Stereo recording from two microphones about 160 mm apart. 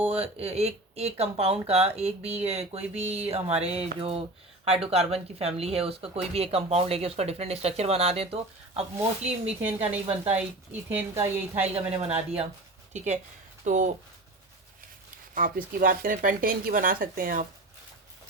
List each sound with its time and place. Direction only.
0.1 s speech: 40° right (ahead or behind)
9.6 s a woman's voice: 10° right (ahead or behind)
11.6 s speech: 40° right (ahead or behind)
13.7 s speech: 55° right (ahead or behind)
15.4 s speech: 60° right (ahead or behind)